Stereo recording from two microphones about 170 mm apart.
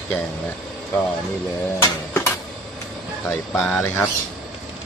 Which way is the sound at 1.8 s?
15° left (ahead or behind).